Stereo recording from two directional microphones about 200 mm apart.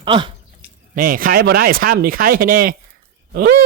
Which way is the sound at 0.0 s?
25° right (ahead or behind).